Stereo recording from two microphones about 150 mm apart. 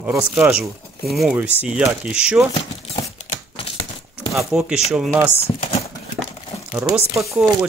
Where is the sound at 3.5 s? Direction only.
40° left (ahead or behind).